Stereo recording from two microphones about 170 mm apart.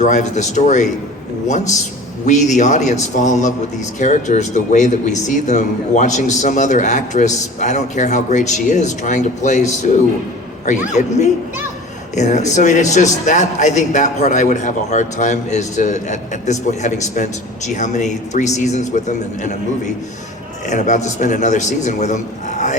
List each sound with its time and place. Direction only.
0.0 s speech: 45° left (ahead or behind)
20.7 s speech: 45° left (ahead or behind)